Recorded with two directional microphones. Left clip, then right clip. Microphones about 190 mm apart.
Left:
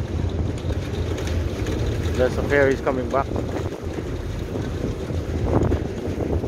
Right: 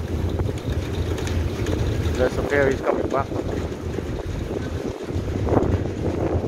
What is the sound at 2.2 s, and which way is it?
Speech, 20° left (ahead or behind).